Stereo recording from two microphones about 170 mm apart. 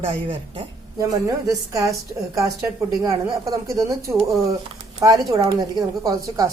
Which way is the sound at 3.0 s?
20° right (ahead or behind).